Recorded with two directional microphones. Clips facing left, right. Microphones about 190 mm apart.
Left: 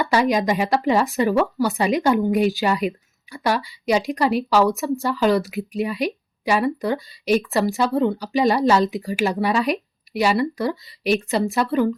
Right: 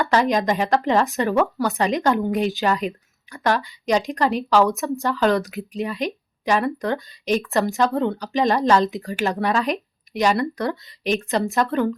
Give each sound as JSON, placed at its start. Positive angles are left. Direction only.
{"t": 0.0, "sound": "speech", "side_deg": 10}
{"t": 2.8, "sound": "a sound", "side_deg": 10}
{"t": 3.7, "sound": "speech", "side_deg": 5}